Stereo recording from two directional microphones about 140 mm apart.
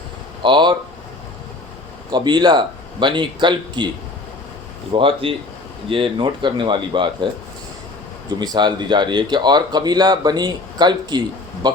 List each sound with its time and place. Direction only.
0.4 s speech: 35° right (ahead or behind)
2.0 s speech: 30° right (ahead or behind)
4.9 s speech: 40° right (ahead or behind)
8.4 s speech: 30° right (ahead or behind)